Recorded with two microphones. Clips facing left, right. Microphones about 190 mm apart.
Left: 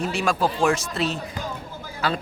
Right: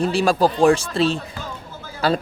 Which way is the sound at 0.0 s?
35° right (ahead or behind).